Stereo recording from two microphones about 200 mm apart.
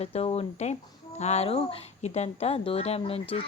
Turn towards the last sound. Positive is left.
turn(degrees=30)  # may be behind; listen again after turning